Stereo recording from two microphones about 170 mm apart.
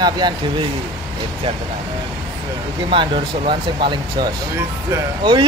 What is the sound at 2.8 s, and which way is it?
Speech, 30° right (ahead or behind).